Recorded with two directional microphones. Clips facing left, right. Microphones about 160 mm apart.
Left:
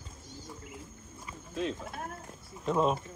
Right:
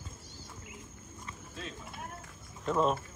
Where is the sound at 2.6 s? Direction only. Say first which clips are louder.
Left 1 dB; centre (ahead or behind).